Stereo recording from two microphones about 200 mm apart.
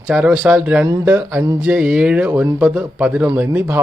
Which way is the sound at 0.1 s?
5° right (ahead or behind).